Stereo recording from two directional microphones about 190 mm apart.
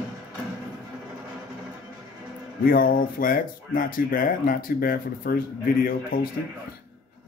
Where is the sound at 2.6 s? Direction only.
50° left (ahead or behind).